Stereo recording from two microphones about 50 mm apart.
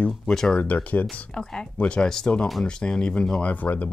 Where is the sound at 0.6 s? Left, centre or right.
Left.